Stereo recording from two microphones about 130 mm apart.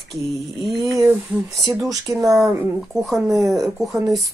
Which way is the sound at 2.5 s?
15° right (ahead or behind).